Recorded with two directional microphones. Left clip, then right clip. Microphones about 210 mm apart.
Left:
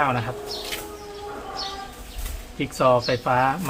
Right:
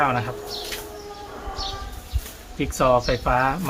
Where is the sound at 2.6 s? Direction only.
20° right (ahead or behind).